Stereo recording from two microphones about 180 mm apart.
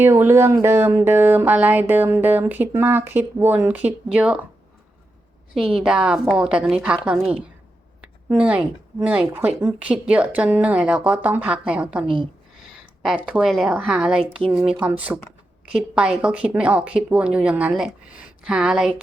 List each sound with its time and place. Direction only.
0.0 s speech: 15° right (ahead or behind)
5.7 s a woman's voice: 5° right (ahead or behind)
12.0 s a woman's voice: 30° right (ahead or behind)
12.5 s speech: 5° right (ahead or behind)